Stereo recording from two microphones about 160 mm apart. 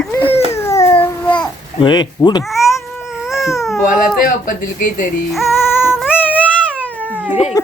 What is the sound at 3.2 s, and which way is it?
Baby cry, centre (ahead or behind).